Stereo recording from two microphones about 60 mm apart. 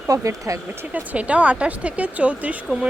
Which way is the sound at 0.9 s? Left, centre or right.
Right.